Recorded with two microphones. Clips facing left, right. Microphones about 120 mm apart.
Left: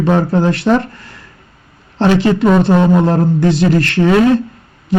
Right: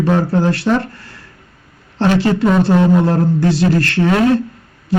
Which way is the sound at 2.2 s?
20° left (ahead or behind).